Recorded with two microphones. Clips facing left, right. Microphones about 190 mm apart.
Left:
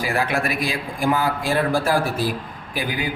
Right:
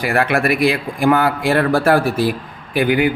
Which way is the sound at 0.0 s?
65° right (ahead or behind).